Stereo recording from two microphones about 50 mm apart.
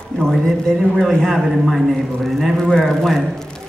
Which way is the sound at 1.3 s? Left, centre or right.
Centre.